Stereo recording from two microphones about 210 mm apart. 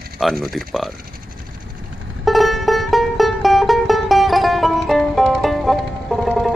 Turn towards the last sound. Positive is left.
turn(degrees=0)  # may be behind; listen again after turning